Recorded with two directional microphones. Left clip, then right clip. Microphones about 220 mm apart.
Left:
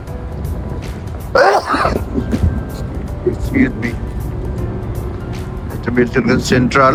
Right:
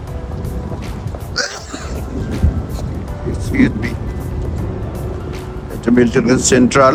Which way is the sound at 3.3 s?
Centre (ahead or behind).